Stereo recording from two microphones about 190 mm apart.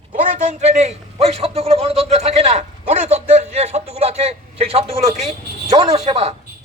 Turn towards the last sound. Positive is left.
turn(degrees=-30)  # may be behind; listen again after turning